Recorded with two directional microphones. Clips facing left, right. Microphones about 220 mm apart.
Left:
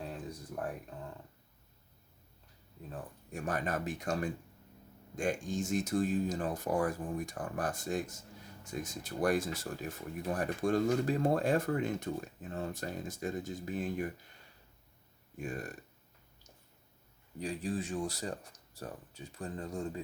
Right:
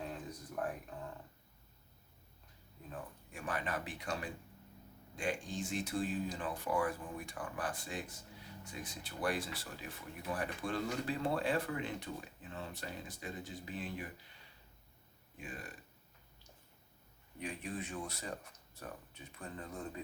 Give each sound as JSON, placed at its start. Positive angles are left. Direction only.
{"t": 3.3, "sound": "speech", "side_deg": 45}
{"t": 15.4, "sound": "speech", "side_deg": 45}
{"t": 17.4, "sound": "speech", "side_deg": 30}